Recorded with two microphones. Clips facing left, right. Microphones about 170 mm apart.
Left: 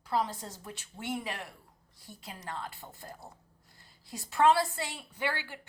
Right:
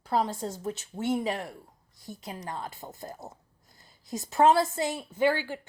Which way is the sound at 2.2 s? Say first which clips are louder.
Right 3 dB; 20° right (ahead or behind).